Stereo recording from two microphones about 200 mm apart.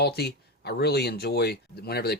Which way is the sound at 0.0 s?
55° left (ahead or behind).